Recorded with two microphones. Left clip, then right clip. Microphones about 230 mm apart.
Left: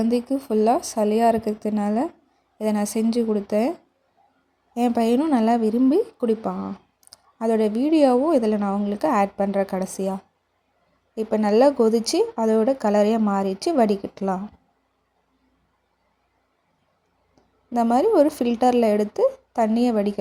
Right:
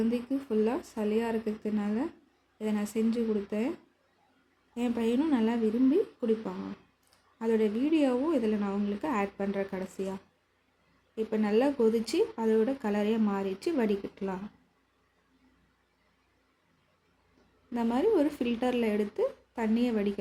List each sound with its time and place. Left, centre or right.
0.1 s speech: left
4.7 s speech: left
17.7 s a woman's voice: left